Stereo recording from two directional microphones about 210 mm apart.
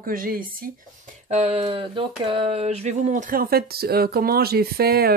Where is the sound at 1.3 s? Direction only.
30° right (ahead or behind).